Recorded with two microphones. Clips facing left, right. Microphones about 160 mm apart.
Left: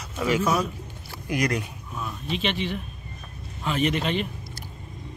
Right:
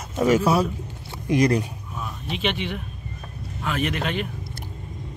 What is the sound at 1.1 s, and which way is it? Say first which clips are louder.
Speech: right 6 dB; 25° right (ahead or behind).